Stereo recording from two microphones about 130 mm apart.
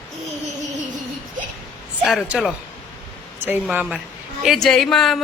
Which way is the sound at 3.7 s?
10° right (ahead or behind).